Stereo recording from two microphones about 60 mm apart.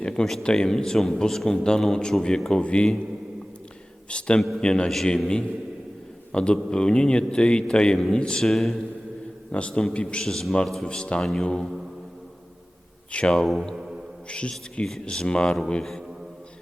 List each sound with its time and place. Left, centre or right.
0.0 s a man's voice: centre
4.4 s a man's voice: centre
4.6 s a man's voice: centre
8.4 s a man's voice: centre
9.5 s a man's voice: centre
10.2 s a man's voice: centre
10.8 s a man's voice: centre
11.2 s a man's voice: centre
13.1 s a man's voice: centre
13.4 s a man's voice: centre
14.3 s a man's voice: centre
15.8 s a man's voice: centre